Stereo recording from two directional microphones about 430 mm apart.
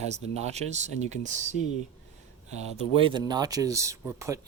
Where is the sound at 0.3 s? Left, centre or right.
Centre.